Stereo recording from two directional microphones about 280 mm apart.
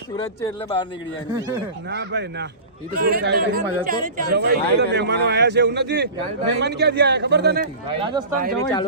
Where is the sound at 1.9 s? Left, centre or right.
Right.